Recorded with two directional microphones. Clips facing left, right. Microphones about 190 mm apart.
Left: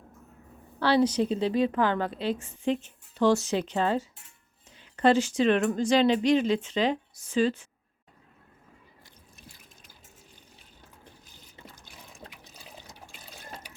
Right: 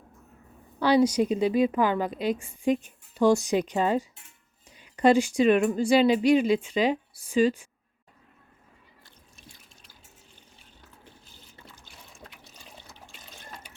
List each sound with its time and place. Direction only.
0.8 s a woman's voice: 15° right (ahead or behind)
12.2 s water: 30° left (ahead or behind)
13.1 s water: 5° left (ahead or behind)